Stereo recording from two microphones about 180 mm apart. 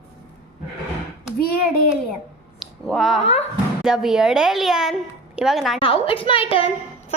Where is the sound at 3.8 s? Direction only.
5° right (ahead or behind).